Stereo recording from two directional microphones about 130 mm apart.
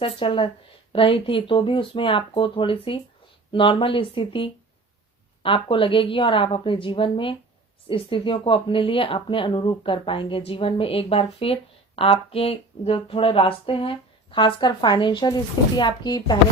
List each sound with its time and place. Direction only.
0.0 s speech: 40° left (ahead or behind)